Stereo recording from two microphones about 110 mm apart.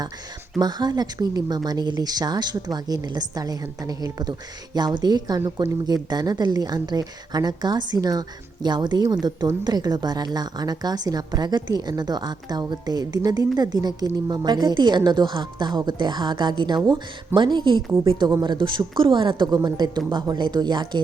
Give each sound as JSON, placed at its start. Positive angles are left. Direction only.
{"t": 0.6, "sound": "a woman's voice", "side_deg": -40}